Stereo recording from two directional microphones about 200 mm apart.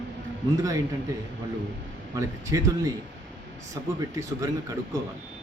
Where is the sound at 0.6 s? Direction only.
15° right (ahead or behind).